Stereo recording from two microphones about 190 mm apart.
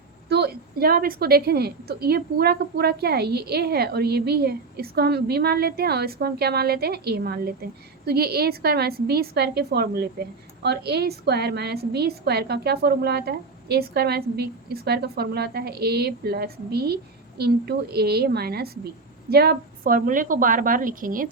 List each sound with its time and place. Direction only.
0.3 s a woman's voice: 60° right (ahead or behind)